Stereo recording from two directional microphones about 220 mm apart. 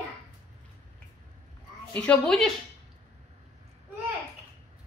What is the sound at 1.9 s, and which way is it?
Speech, 5° left (ahead or behind).